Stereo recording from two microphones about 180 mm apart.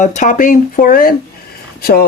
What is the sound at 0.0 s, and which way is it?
Speech, 45° left (ahead or behind).